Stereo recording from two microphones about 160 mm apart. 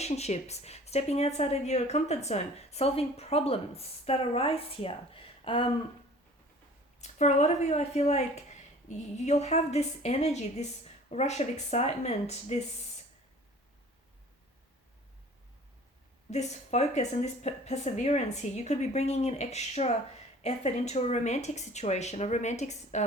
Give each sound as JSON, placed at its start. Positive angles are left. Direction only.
{"t": 0.0, "sound": "a woman's voice", "side_deg": 45}
{"t": 7.0, "sound": "speech", "side_deg": 45}
{"t": 16.3, "sound": "speech", "side_deg": 45}